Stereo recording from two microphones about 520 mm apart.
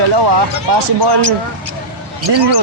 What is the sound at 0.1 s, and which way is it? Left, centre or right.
Speech, right.